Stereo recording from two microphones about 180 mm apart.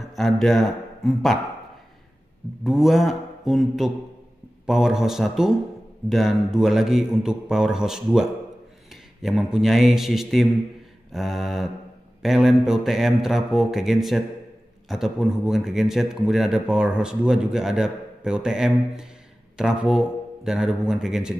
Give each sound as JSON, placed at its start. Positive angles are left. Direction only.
{"t": 0.0, "sound": "a man's voice", "side_deg": 0}
{"t": 2.6, "sound": "a man's voice", "side_deg": 0}